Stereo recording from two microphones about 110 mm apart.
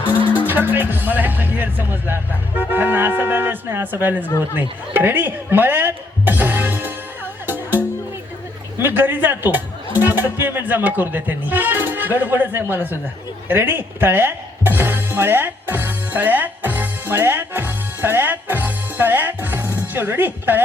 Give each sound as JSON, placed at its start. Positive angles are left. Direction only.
{"t": 0.3, "sound": "speech", "side_deg": -15}
{"t": 7.4, "sound": "music", "side_deg": -15}
{"t": 8.8, "sound": "speech", "side_deg": -20}
{"t": 13.5, "sound": "music", "side_deg": -20}